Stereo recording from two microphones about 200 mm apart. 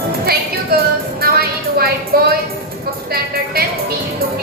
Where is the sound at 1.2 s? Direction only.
50° right (ahead or behind).